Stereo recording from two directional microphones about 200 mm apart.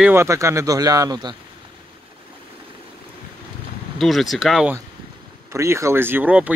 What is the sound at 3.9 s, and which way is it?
Speech, centre (ahead or behind).